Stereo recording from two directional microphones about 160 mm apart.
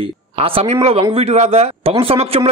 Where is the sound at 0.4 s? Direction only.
40° right (ahead or behind).